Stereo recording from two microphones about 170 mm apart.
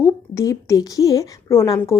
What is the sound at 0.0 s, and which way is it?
A woman's voice, 20° left (ahead or behind).